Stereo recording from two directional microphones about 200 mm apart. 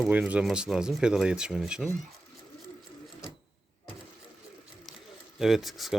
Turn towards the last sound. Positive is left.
turn(degrees=0)  # may be behind; listen again after turning